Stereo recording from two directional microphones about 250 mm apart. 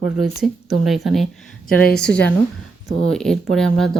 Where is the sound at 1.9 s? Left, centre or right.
Centre.